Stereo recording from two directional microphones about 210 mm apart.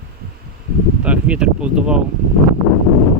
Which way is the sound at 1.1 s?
5° right (ahead or behind).